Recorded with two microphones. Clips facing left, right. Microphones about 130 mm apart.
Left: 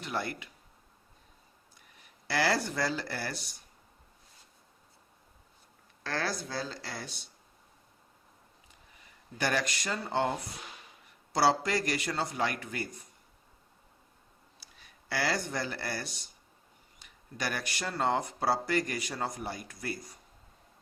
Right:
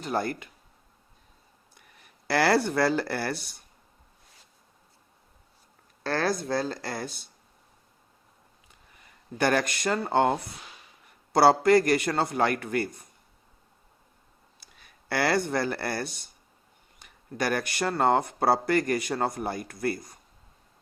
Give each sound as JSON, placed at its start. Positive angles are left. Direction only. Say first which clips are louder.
{"t": 0.0, "sound": "speech", "louder": "right 6 dB", "side_deg": -45}
{"t": 2.2, "sound": "speech", "louder": "right 6 dB", "side_deg": -60}
{"t": 6.5, "sound": "speech", "louder": "right 8 dB", "side_deg": -50}
{"t": 9.0, "sound": "speech", "louder": "right 7 dB", "side_deg": -50}
{"t": 14.6, "sound": "speech", "louder": "right 2 dB", "side_deg": -55}